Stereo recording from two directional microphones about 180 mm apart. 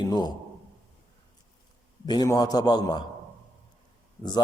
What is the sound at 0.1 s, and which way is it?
Speech, 25° left (ahead or behind).